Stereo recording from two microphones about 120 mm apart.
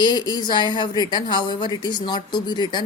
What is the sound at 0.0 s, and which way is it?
A woman's voice, 35° left (ahead or behind).